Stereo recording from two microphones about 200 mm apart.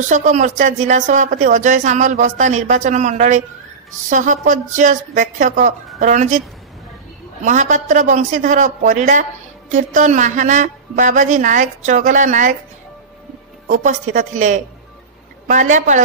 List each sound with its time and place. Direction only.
0.0 s speech: 40° right (ahead or behind)
7.4 s speech: 40° right (ahead or behind)
13.7 s speech: 40° right (ahead or behind)